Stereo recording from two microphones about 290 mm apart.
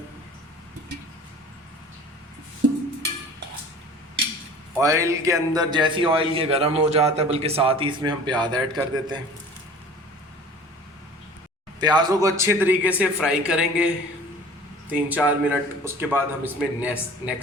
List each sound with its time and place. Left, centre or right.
4.8 s a man's voice: centre
11.8 s a man's voice: centre